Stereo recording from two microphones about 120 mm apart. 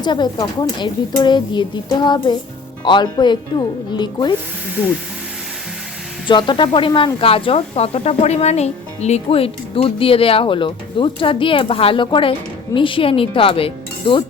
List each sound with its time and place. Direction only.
0.0 s child singing: 40° left (ahead or behind)
6.2 s speech: 40° left (ahead or behind)